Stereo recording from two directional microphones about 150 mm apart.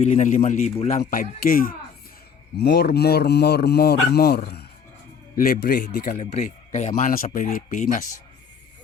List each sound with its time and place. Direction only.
0.0 s speech: 55° left (ahead or behind); by 1.7 s 75° left (ahead or behind)
2.6 s speech: 90° left
5.4 s speech: 75° left (ahead or behind); by 8.0 s 55° left (ahead or behind)